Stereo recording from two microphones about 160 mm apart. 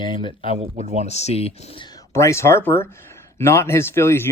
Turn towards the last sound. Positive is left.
turn(degrees=15)  # may be behind; listen again after turning